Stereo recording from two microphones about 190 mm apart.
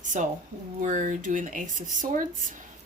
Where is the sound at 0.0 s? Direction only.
40° right (ahead or behind).